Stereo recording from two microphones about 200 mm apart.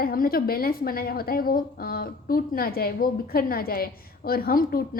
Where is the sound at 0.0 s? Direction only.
50° left (ahead or behind).